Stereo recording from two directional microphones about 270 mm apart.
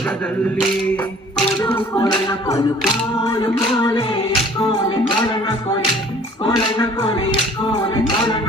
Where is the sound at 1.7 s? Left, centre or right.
Centre.